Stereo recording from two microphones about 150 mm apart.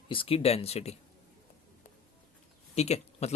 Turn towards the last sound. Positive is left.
turn(degrees=45)  # may be behind; listen again after turning